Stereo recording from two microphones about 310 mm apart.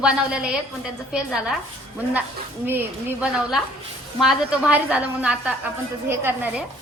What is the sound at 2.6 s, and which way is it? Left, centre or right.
A child's voice, centre.